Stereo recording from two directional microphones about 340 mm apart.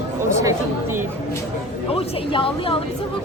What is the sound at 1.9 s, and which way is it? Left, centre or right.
Speech, centre.